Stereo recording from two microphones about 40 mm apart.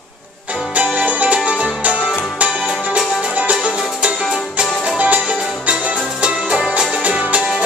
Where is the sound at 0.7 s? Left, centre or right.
Right.